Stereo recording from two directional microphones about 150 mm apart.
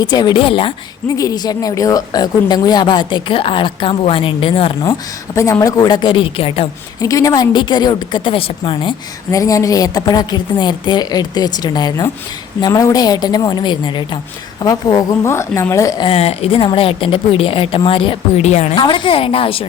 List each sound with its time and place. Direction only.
0.0 s speech: 30° left (ahead or behind)
1.0 s speech: 25° left (ahead or behind); by 4.7 s 40° left (ahead or behind)
4.8 s a woman's voice: 20° left (ahead or behind); by 6.7 s 40° left (ahead or behind)
7.0 s speech: 20° left (ahead or behind)
9.3 s a woman's voice: 20° left (ahead or behind)
16.0 s speech: 40° left (ahead or behind)
18.8 s speech: 35° left (ahead or behind)